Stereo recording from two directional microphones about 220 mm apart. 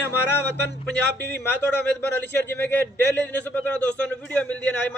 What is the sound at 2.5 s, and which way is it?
A man's voice, 10° left (ahead or behind).